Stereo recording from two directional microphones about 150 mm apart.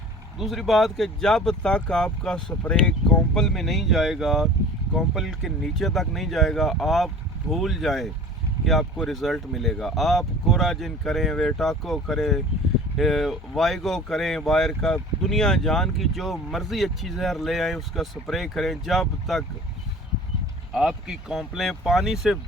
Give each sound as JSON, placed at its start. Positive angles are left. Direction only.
{"t": 0.3, "sound": "speech", "side_deg": 0}
{"t": 20.7, "sound": "speech", "side_deg": -5}